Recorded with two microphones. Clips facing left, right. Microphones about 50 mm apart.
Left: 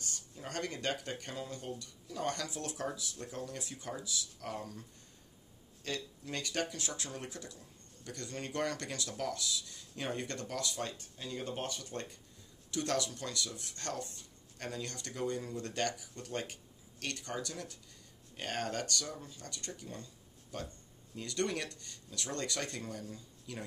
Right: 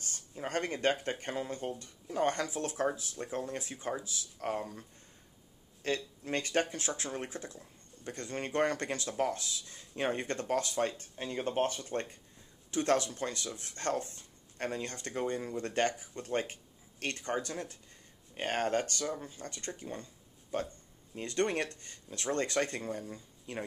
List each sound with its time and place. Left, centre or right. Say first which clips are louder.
0.1 s speech: right 8 dB; right
5.8 s speech: right 6 dB; right